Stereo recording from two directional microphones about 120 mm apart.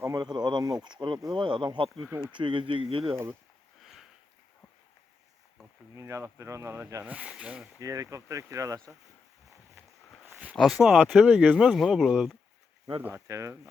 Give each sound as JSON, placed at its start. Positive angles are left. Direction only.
{"t": 0.0, "sound": "speech", "side_deg": -35}
{"t": 6.0, "sound": "speech", "side_deg": -25}
{"t": 7.0, "sound": "speech", "side_deg": -10}
{"t": 7.8, "sound": "speech", "side_deg": -30}
{"t": 10.2, "sound": "a sound", "side_deg": -15}
{"t": 10.5, "sound": "speech", "side_deg": 0}
{"t": 13.0, "sound": "speech", "side_deg": -15}
{"t": 13.2, "sound": "speech", "side_deg": -25}